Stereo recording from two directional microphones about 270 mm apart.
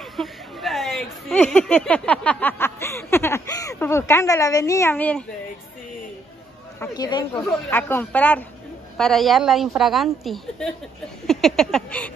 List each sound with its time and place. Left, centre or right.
0.1 s speech: centre
6.8 s a woman's voice: centre